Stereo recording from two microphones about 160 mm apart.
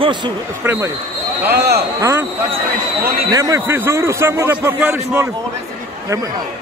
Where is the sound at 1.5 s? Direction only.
85° right.